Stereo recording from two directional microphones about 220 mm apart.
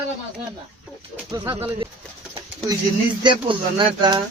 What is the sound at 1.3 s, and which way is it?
Speech, 20° right (ahead or behind).